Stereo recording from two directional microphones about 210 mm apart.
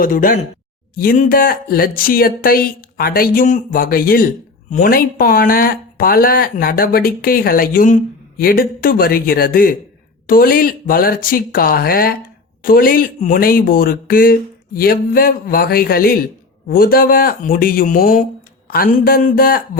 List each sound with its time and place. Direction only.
0.0 s speech: 40° left (ahead or behind)